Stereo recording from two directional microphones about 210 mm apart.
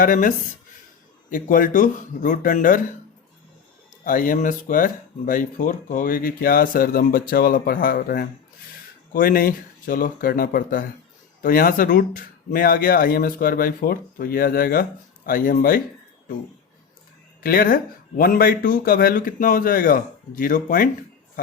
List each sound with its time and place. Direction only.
0.0 s speech: 40° left (ahead or behind)
4.0 s speech: 40° left (ahead or behind)
17.4 s speech: 45° left (ahead or behind)